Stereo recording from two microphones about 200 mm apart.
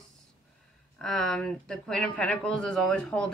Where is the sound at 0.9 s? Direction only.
Centre (ahead or behind).